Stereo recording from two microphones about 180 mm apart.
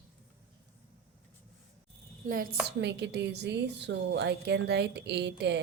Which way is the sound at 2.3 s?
50° right (ahead or behind).